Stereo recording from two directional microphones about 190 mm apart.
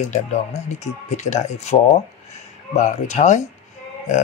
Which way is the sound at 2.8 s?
40° left (ahead or behind).